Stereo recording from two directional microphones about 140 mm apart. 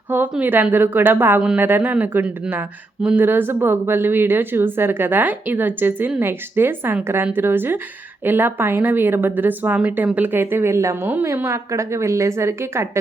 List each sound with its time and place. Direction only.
0.1 s speech: 15° right (ahead or behind)